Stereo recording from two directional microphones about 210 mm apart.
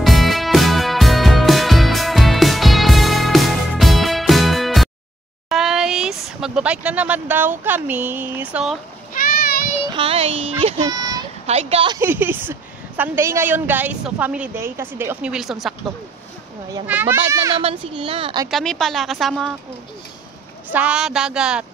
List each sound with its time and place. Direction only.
0.0 s music: centre (ahead or behind)
5.5 s speech: centre (ahead or behind)
9.1 s a sound: 45° left (ahead or behind)
9.9 s a woman's voice: 30° right (ahead or behind)
11.4 s a woman's voice: 30° right (ahead or behind)
12.0 s a woman's voice: 10° right (ahead or behind)
16.8 s a woman's voice: 10° right (ahead or behind)
17.6 s a woman's voice: 25° right (ahead or behind)
18.5 s speech: centre (ahead or behind)
20.7 s speech: 5° right (ahead or behind)